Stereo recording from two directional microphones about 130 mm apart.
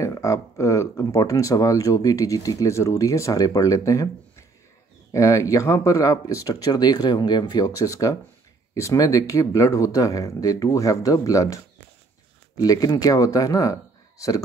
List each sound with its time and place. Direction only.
0.0 s speech: 25° left (ahead or behind)